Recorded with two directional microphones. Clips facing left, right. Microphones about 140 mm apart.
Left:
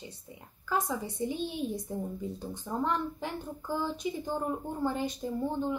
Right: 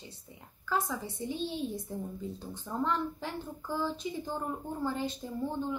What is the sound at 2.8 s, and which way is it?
Speech, 15° left (ahead or behind).